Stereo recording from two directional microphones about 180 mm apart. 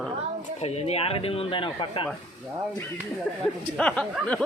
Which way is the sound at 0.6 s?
35° left (ahead or behind).